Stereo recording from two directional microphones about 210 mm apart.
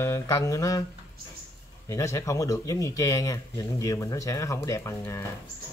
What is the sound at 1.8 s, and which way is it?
Speech, 15° left (ahead or behind).